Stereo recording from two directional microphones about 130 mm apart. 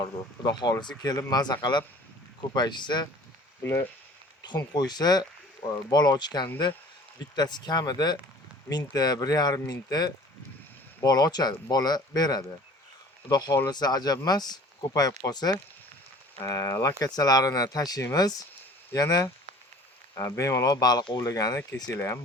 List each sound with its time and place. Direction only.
0.4 s speech: 30° left (ahead or behind)
3.6 s speech: 20° left (ahead or behind)
4.4 s speech: 30° left (ahead or behind)